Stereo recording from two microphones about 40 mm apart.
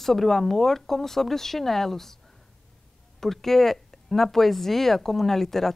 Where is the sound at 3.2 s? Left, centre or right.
Centre.